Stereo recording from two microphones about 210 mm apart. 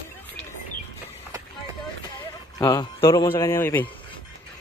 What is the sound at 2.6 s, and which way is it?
A man's voice, 20° left (ahead or behind).